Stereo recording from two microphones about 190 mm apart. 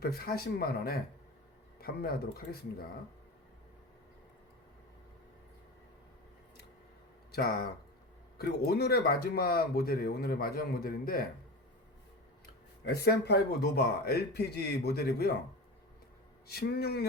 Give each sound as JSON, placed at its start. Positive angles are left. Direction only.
{"t": 0.0, "sound": "speech", "side_deg": 55}
{"t": 7.3, "sound": "speech", "side_deg": 55}
{"t": 12.8, "sound": "a man's voice", "side_deg": 60}
{"t": 16.5, "sound": "a man's voice", "side_deg": 55}